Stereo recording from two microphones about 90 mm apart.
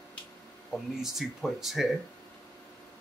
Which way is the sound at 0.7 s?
Centre (ahead or behind).